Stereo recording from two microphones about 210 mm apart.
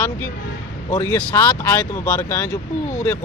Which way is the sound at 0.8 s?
15° left (ahead or behind).